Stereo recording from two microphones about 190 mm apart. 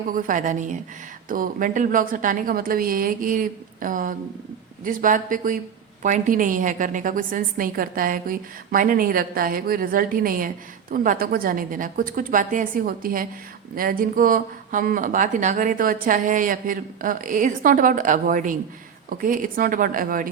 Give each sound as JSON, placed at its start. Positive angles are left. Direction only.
{"t": 0.1, "sound": "speech", "side_deg": -45}